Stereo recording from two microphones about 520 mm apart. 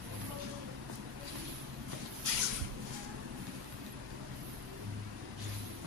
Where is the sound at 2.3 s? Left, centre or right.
Right.